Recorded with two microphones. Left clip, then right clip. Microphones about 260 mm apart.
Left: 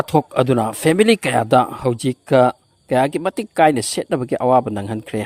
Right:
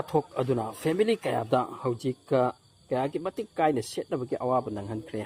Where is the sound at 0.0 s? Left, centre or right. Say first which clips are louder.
Left 11 dB; left.